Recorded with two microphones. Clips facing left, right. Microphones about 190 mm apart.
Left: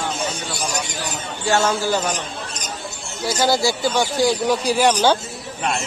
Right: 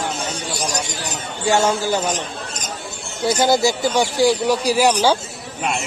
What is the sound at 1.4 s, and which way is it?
Speech, 15° right (ahead or behind).